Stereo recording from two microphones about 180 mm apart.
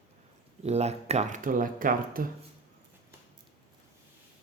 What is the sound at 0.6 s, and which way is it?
Speech, 35° right (ahead or behind).